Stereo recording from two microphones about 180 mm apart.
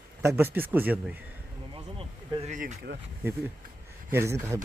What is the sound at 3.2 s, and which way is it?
Speech, 15° right (ahead or behind).